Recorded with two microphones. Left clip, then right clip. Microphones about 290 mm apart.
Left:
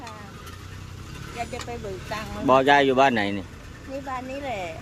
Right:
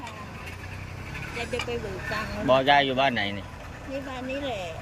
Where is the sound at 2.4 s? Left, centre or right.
Centre.